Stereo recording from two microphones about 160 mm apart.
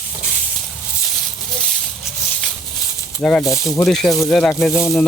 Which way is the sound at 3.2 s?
5° left (ahead or behind).